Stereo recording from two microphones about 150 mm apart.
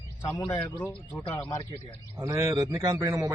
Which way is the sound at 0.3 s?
30° left (ahead or behind).